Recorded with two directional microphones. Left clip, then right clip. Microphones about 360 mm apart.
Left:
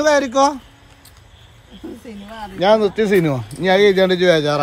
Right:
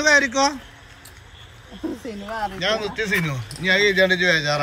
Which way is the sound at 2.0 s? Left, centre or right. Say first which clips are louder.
Right 6 dB; right.